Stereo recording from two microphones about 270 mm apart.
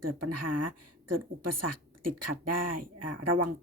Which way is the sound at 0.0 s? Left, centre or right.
Right.